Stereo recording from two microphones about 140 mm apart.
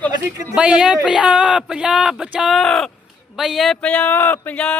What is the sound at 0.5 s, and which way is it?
Speech, 5° right (ahead or behind).